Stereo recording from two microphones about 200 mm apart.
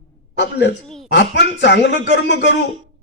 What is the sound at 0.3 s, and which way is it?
A man's voice, 60° left (ahead or behind).